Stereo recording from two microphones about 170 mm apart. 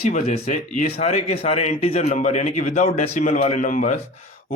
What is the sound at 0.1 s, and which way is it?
A man's voice, 40° left (ahead or behind).